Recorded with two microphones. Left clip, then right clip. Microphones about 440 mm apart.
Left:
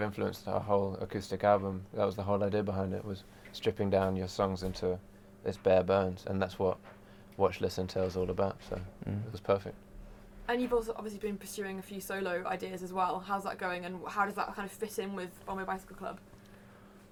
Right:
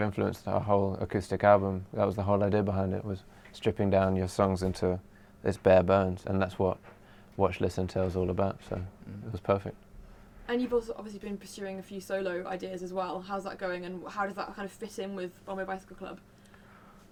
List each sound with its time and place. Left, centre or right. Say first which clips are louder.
0.0 s speech: right 4 dB; right
10.4 s speech: right 1 dB; centre